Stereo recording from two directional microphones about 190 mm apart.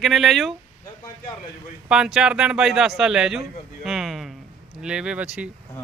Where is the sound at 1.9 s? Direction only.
5° right (ahead or behind).